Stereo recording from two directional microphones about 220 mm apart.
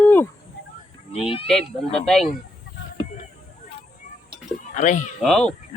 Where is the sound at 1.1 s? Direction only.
25° left (ahead or behind).